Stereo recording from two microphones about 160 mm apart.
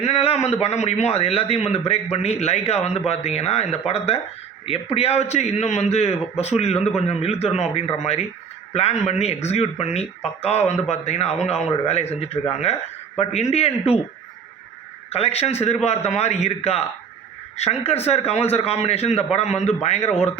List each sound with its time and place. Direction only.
0.0 s a man's voice: 40° left (ahead or behind)
15.1 s a man's voice: 40° left (ahead or behind)